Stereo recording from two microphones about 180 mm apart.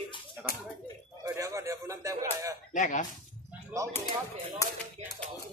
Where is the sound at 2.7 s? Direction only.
45° left (ahead or behind).